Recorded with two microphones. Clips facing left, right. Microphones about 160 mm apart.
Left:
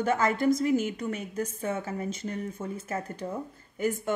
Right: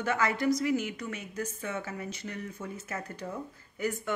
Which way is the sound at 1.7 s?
30° left (ahead or behind).